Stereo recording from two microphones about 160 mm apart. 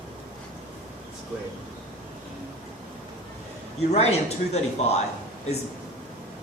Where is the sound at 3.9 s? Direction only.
40° left (ahead or behind).